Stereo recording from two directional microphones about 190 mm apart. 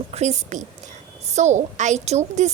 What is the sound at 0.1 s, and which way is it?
A woman's voice, 35° right (ahead or behind).